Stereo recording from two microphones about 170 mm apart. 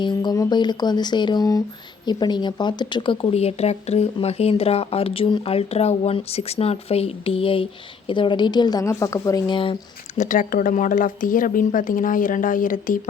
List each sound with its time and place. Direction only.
0.0 s speech: 25° left (ahead or behind)
10.2 s speech: 50° left (ahead or behind)